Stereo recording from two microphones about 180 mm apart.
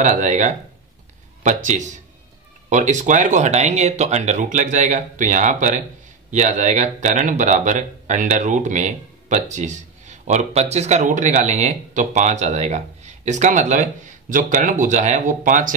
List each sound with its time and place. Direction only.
0.0 s a man's voice: 40° right (ahead or behind)